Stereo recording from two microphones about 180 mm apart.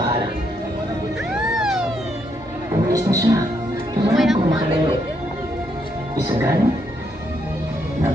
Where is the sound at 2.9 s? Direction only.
15° right (ahead or behind).